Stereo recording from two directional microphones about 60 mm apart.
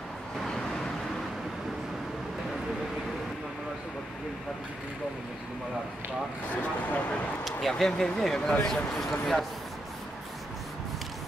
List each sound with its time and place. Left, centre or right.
6.5 s speech: left
7.4 s speech: centre